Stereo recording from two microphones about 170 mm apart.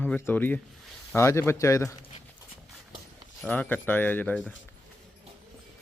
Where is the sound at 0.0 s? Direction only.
10° left (ahead or behind).